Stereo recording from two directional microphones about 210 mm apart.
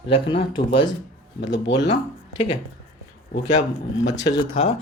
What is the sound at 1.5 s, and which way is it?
Speech, 60° left (ahead or behind).